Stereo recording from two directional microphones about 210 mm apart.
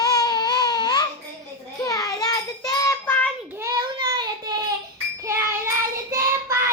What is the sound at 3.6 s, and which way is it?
Child singing, 20° right (ahead or behind).